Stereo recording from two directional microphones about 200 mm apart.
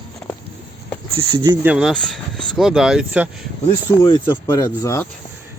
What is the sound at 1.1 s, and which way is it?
Speech, 20° right (ahead or behind).